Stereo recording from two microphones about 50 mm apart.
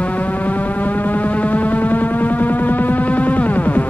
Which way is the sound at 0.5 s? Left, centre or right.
Left.